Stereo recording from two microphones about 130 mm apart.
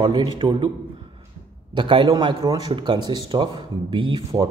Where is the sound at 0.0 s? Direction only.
35° right (ahead or behind).